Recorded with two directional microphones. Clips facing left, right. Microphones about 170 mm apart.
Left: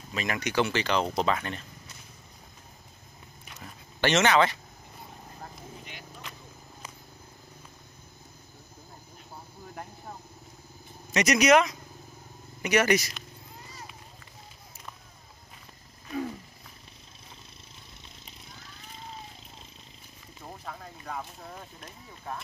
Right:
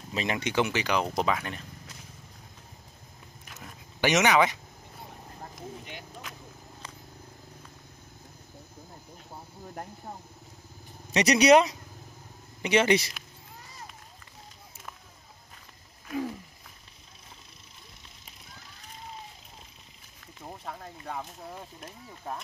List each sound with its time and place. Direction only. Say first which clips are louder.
0.1 s speech: right 1 dB; 25° right (ahead or behind)
0.7 s speech: left 1 dB; 10° right (ahead or behind)
4.0 s speech: even; 10° right (ahead or behind)
11.1 s speech: right 2 dB; 35° right (ahead or behind)
20.6 s a sound: right 1 dB; 25° right (ahead or behind)